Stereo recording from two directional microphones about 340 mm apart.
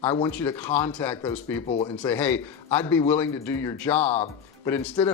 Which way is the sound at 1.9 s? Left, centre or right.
Centre.